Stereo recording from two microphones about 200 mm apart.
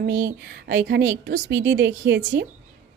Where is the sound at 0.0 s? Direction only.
55° right (ahead or behind).